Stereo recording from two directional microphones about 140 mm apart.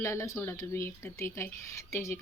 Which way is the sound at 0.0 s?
20° left (ahead or behind).